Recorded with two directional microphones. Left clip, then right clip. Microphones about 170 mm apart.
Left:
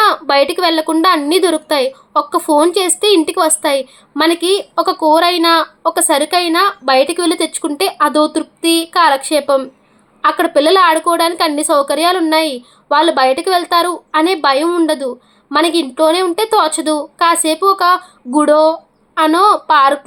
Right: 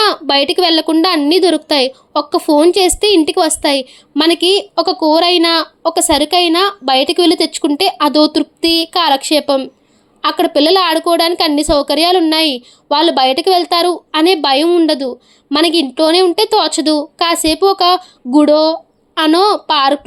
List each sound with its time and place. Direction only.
0.0 s a woman's voice: 35° right (ahead or behind)